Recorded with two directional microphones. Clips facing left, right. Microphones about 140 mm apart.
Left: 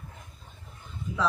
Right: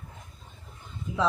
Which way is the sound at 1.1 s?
15° right (ahead or behind).